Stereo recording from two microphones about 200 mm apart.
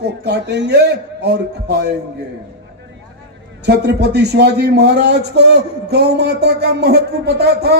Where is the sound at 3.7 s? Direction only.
55° right (ahead or behind).